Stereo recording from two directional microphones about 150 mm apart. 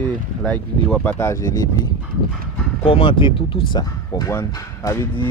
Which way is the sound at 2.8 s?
35° left (ahead or behind).